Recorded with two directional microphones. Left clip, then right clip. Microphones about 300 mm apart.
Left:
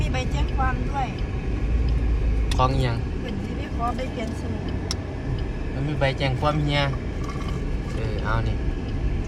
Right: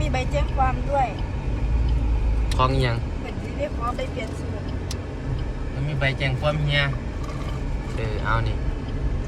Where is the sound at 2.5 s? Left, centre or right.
Centre.